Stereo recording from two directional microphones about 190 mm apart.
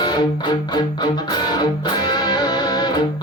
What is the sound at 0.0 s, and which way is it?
Music, 20° left (ahead or behind).